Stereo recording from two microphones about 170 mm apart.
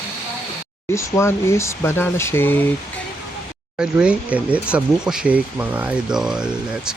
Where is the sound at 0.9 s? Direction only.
15° left (ahead or behind).